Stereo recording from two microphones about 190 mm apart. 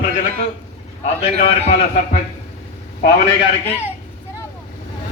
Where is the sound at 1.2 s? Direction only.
35° left (ahead or behind).